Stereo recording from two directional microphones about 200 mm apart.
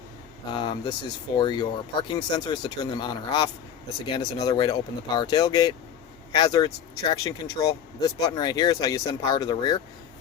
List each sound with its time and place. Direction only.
0.5 s speech: 25° left (ahead or behind)